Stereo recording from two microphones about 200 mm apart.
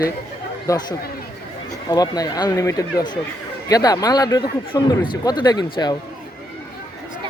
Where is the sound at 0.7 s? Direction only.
15° left (ahead or behind).